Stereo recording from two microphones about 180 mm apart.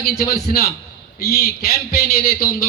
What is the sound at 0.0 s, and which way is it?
A man's voice, 60° left (ahead or behind).